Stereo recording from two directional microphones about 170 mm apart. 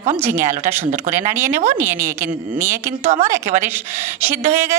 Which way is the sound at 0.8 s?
50° right (ahead or behind).